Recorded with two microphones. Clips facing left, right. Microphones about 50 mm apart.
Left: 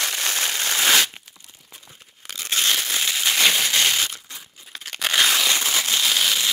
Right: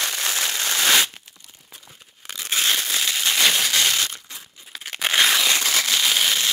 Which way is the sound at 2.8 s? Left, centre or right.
Centre.